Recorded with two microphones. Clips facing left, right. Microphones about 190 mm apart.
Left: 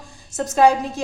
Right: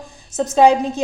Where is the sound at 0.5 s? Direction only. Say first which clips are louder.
Right 3 dB; 20° right (ahead or behind).